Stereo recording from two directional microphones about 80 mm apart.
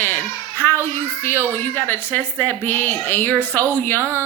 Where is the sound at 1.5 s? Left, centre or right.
Left.